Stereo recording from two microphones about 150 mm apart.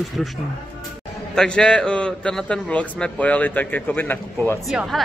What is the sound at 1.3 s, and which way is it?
A man's voice, 5° left (ahead or behind).